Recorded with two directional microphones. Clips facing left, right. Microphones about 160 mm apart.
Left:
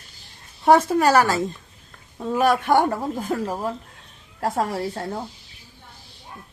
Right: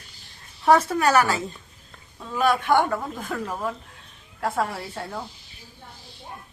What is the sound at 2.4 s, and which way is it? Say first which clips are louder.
A man's voice: left 2 dB; 40° left (ahead or behind).